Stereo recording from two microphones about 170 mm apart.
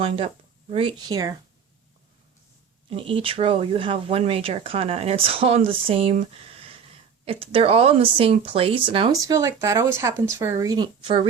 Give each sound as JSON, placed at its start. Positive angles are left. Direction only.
{"t": 0.7, "sound": "speech", "side_deg": -30}
{"t": 2.9, "sound": "speech", "side_deg": -30}
{"t": 7.3, "sound": "speech", "side_deg": -35}
{"t": 9.2, "sound": "speech", "side_deg": -20}